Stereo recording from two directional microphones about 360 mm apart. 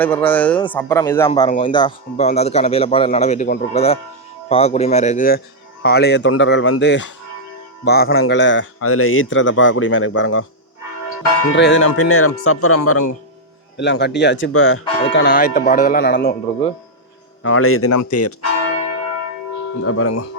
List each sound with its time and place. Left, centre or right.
0.0 s a man's voice: centre
17.4 s a man's voice: left
19.8 s a man's voice: left